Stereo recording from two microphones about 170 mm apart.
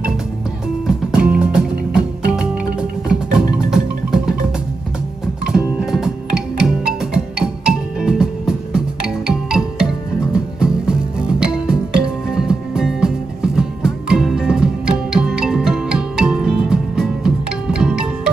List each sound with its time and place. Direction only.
0.8 s music: 5° right (ahead or behind)
5.5 s music: 5° right (ahead or behind)